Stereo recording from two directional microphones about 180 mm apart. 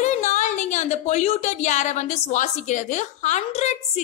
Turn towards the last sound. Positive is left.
turn(degrees=35)  # may be behind; listen again after turning